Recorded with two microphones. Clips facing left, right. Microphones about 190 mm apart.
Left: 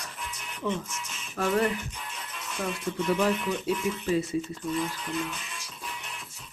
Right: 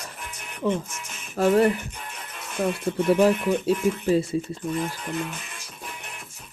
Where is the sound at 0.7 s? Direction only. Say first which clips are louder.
Right 5 dB; 55° right (ahead or behind).